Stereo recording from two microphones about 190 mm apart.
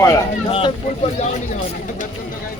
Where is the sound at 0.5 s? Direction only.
30° left (ahead or behind).